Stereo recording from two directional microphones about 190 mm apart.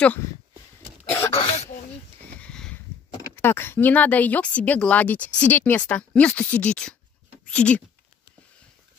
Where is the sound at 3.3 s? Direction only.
10° left (ahead or behind).